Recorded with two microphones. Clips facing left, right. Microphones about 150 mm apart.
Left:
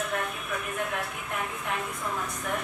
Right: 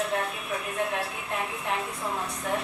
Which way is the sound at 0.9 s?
25° right (ahead or behind).